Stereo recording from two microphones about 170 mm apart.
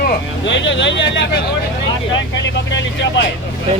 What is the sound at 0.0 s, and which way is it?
Speech, 90° left.